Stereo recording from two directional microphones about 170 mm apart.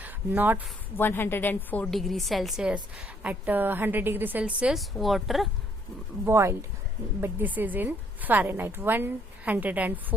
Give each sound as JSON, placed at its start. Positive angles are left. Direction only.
{"t": 0.0, "sound": "a sound", "side_deg": -10}
{"t": 0.9, "sound": "a woman's voice", "side_deg": 10}
{"t": 6.2, "sound": "a woman's voice", "side_deg": -15}